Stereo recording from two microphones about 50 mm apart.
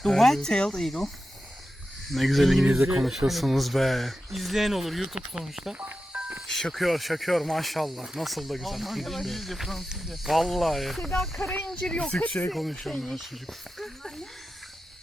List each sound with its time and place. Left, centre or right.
0.0 s speech: centre
5.7 s speech: right
6.1 s music: right
6.5 s speech: centre
6.7 s speech: centre
11.7 s speech: centre
12.5 s speech: centre